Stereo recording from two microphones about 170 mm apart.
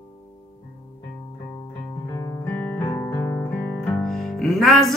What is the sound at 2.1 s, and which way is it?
Guitar, 20° left (ahead or behind).